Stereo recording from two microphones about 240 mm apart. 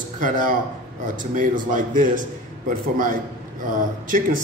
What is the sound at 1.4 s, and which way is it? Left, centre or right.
Speech, right.